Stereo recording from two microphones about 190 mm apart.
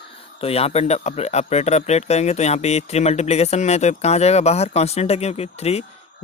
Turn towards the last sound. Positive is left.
turn(degrees=35)  # may be behind; listen again after turning